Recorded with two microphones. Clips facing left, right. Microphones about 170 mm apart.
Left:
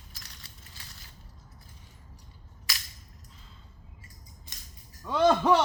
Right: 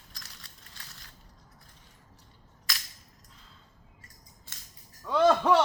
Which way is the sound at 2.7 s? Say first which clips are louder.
Right 1 dB; centre (ahead or behind).